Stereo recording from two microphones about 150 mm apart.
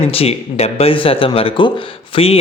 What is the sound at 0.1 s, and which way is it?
Speech, 40° left (ahead or behind).